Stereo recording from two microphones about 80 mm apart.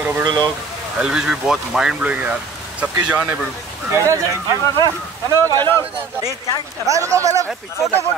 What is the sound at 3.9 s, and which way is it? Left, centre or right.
Speech, right.